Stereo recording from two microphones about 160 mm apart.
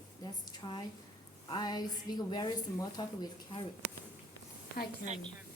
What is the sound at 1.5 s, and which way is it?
A woman's voice, 25° left (ahead or behind).